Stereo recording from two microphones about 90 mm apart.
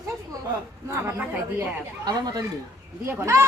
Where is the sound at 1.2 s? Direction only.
15° right (ahead or behind).